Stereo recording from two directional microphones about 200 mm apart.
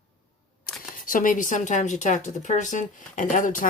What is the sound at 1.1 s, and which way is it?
Speech, 40° left (ahead or behind).